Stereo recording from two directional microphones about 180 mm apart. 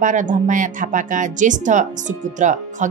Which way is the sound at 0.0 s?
45° right (ahead or behind).